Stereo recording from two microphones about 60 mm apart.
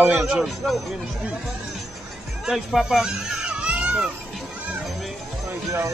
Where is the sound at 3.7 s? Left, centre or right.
Centre.